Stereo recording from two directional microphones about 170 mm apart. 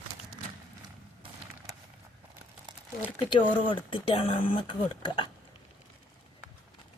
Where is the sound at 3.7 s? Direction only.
30° left (ahead or behind).